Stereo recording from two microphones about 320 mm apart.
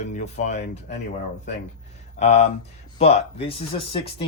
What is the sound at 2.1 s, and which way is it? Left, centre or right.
Speech, left.